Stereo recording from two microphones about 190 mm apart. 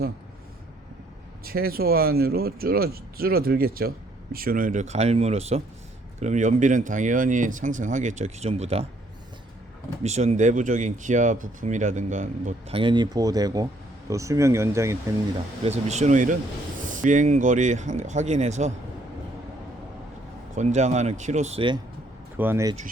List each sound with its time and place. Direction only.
1.5 s speech: 50° right (ahead or behind); by 8.9 s 35° right (ahead or behind)
10.0 s speech: 35° right (ahead or behind); by 14.9 s 15° right (ahead or behind)
15.6 s speech: 35° right (ahead or behind)
20.6 s speech: 35° right (ahead or behind)
22.4 s speech: 15° right (ahead or behind)